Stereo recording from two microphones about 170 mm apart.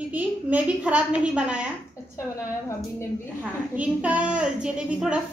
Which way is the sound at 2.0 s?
15° left (ahead or behind).